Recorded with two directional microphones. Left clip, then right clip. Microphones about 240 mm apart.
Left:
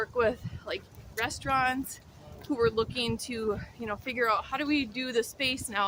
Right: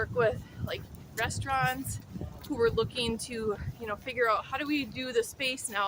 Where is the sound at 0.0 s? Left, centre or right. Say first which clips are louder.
Even; centre.